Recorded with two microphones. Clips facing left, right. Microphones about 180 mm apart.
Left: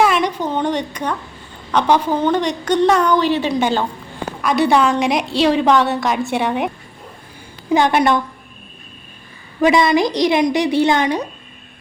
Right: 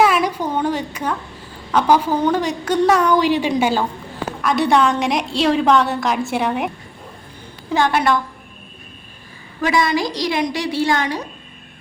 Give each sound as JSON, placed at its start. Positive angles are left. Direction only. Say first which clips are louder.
{"t": 0.0, "sound": "a sound", "louder": "even", "side_deg": -5}
{"t": 1.7, "sound": "a woman's voice", "louder": "even", "side_deg": -10}
{"t": 7.7, "sound": "a woman's voice", "louder": "left 3 dB", "side_deg": 20}
{"t": 9.6, "sound": "a woman's voice", "louder": "left 5 dB", "side_deg": 20}